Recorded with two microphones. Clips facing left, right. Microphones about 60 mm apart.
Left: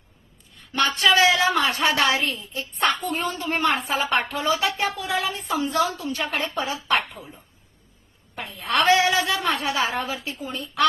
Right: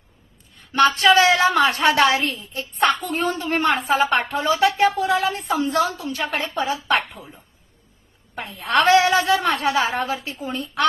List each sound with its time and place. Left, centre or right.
0.7 s a woman's voice: right
8.4 s a woman's voice: right